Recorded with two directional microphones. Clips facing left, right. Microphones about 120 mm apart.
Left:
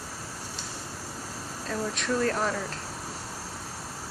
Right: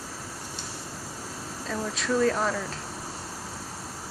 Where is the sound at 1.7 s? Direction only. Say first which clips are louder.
Right 1 dB; centre (ahead or behind).